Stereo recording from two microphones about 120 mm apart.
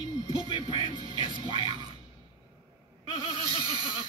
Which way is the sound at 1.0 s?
40° right (ahead or behind).